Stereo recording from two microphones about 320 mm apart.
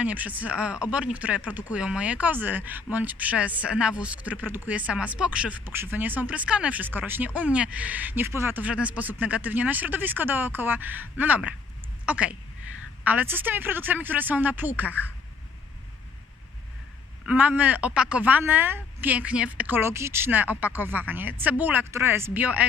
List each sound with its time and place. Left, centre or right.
0.0 s speech: centre
17.2 s speech: centre